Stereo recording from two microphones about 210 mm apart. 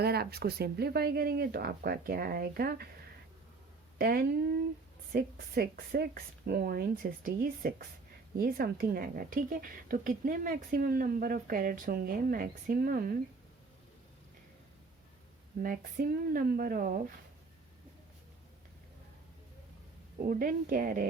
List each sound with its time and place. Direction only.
0.0 s speech: 50° right (ahead or behind)
3.9 s speech: 45° right (ahead or behind)
15.6 s speech: 40° right (ahead or behind)
20.2 s speech: 40° right (ahead or behind)